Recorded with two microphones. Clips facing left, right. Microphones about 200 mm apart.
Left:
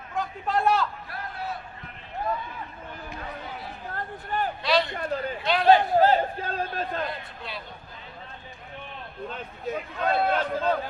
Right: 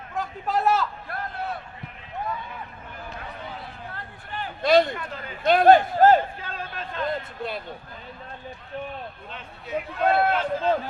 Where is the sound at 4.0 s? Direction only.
45° left (ahead or behind).